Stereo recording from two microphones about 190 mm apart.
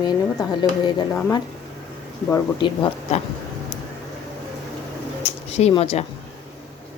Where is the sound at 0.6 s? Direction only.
25° left (ahead or behind).